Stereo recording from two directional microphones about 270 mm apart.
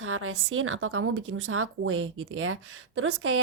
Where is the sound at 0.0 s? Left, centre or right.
Right.